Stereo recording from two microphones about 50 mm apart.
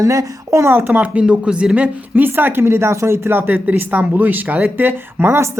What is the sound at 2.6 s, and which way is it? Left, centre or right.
Speech, right.